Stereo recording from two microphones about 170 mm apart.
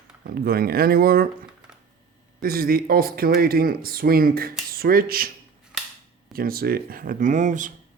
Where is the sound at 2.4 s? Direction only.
60° right (ahead or behind).